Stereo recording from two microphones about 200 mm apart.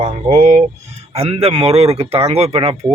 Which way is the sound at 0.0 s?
35° right (ahead or behind).